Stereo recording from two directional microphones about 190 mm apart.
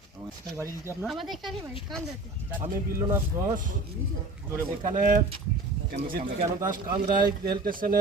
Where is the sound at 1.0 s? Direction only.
Centre (ahead or behind).